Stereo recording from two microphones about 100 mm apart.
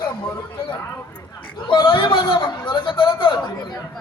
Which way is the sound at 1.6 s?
55° left (ahead or behind).